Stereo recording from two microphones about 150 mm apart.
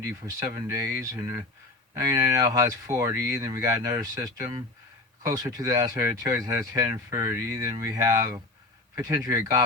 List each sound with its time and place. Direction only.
0.5 s speech: 20° right (ahead or behind)